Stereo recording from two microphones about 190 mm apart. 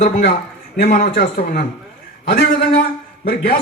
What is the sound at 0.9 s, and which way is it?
Speech, 40° left (ahead or behind).